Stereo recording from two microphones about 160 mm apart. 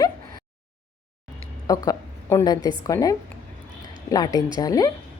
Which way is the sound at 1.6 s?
20° left (ahead or behind).